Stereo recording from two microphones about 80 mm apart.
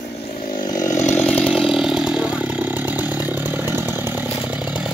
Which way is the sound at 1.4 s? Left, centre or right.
Centre.